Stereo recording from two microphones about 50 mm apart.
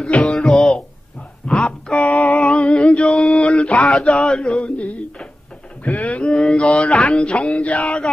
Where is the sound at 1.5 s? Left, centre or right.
Left.